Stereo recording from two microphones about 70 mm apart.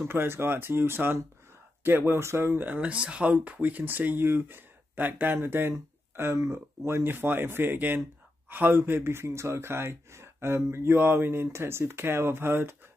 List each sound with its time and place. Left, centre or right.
0.0 s speech: right
6.3 s speech: right